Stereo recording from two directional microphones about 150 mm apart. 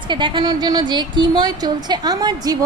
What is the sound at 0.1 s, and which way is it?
Speech, 30° right (ahead or behind).